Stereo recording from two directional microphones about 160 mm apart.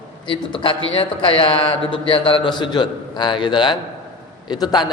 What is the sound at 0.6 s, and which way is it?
A man's voice, 35° left (ahead or behind).